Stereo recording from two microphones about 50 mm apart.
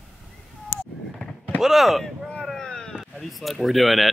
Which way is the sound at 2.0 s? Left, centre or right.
Centre.